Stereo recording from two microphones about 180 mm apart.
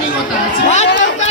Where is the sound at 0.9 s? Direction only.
90° left.